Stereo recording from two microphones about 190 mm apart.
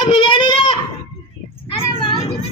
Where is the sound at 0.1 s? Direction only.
25° left (ahead or behind).